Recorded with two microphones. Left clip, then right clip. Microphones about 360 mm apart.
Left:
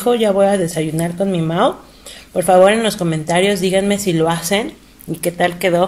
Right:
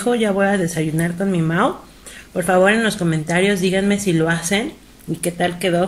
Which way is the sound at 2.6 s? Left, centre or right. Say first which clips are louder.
Left 3 dB; centre.